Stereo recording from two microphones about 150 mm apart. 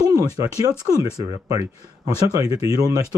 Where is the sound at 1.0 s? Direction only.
20° right (ahead or behind).